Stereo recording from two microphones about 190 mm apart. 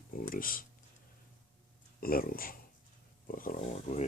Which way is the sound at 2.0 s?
50° left (ahead or behind).